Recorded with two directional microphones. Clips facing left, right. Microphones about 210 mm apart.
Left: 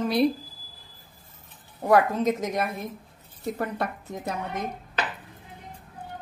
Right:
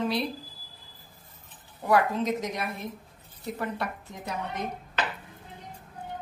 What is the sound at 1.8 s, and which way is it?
A woman's voice, 45° left (ahead or behind).